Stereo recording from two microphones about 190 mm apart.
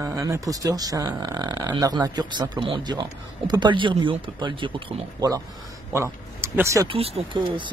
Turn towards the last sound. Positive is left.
turn(degrees=-25)  # may be behind; listen again after turning